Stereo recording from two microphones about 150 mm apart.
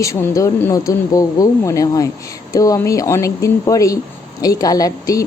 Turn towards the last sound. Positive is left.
turn(degrees=25)  # may be behind; listen again after turning